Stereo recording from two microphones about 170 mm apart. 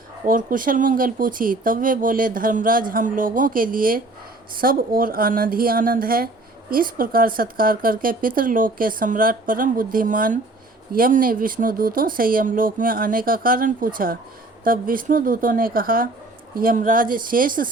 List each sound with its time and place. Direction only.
0.3 s speech: 55° right (ahead or behind)